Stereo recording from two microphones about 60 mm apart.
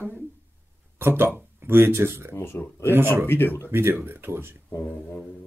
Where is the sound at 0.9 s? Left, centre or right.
Right.